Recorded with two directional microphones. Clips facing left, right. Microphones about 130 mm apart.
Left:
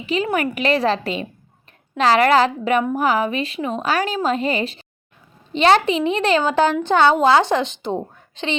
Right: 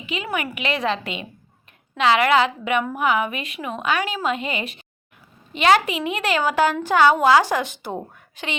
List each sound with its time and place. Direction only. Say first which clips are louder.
0.0 s a woman's voice: left 6 dB; 35° left (ahead or behind)